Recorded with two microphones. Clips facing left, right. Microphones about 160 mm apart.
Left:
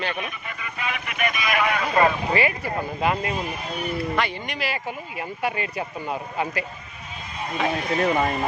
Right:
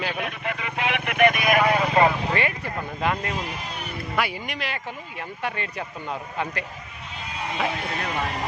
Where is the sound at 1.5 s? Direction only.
40° right (ahead or behind).